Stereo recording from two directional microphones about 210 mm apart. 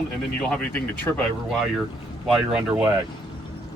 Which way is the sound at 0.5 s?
5° left (ahead or behind).